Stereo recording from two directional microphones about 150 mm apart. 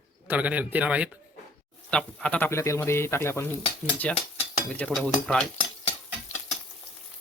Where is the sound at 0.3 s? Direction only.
10° right (ahead or behind).